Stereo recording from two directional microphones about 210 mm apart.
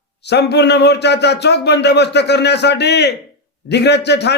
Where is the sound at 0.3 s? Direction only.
55° left (ahead or behind).